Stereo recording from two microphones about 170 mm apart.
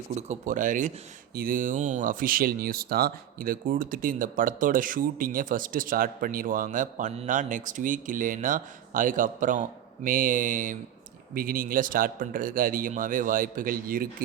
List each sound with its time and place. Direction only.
0.1 s speech: 40° right (ahead or behind)